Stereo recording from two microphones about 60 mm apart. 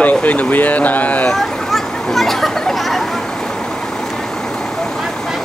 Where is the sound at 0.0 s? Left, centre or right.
Left.